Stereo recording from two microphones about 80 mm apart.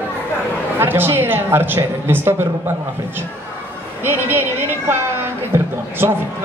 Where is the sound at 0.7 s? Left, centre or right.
Right.